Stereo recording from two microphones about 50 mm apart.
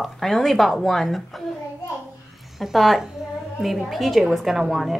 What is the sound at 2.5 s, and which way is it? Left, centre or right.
Child singing, centre.